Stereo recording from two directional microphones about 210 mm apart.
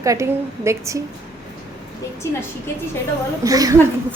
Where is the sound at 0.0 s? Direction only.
15° right (ahead or behind).